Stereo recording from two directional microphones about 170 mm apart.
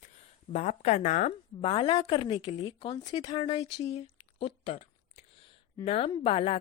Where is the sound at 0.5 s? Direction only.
45° left (ahead or behind).